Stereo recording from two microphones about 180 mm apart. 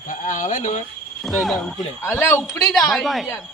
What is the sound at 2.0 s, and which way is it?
Speech, 15° left (ahead or behind).